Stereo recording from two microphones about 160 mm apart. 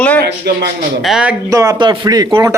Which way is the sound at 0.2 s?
80° right.